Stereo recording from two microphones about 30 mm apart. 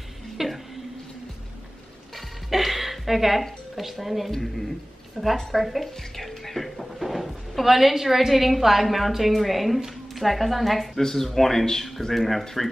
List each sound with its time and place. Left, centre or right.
0.4 s a sound: centre
2.1 s music: centre
3.7 s a woman's voice: centre
11.0 s speech: centre